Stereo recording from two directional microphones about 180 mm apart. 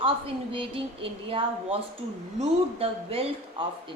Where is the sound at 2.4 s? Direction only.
30° right (ahead or behind).